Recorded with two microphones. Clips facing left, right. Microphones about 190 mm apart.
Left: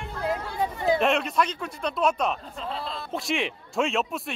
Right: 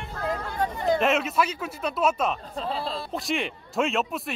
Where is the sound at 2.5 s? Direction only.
35° right (ahead or behind).